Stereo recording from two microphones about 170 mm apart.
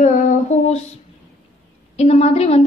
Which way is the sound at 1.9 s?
35° left (ahead or behind).